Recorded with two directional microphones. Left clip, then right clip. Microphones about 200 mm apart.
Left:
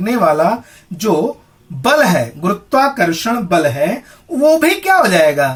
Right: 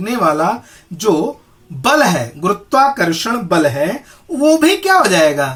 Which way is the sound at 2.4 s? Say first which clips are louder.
Right 3 dB; 25° right (ahead or behind).